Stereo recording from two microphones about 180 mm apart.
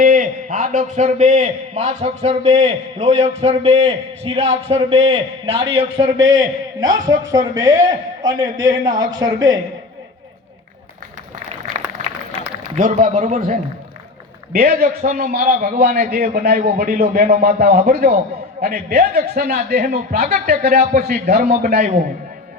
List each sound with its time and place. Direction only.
0.0 s a man's voice: 45° right (ahead or behind); by 6.9 s 20° right (ahead or behind)
6.9 s speech: 45° right (ahead or behind)
7.3 s a man's voice: 20° right (ahead or behind)
12.7 s a man's voice: 45° right (ahead or behind)
14.5 s a man's voice: 50° right (ahead or behind)
20.2 s a man's voice: 40° right (ahead or behind)